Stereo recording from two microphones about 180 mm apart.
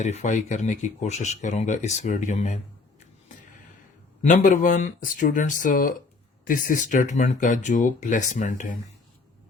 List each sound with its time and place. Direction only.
0.0 s speech: 40° left (ahead or behind)
4.2 s speech: 45° left (ahead or behind)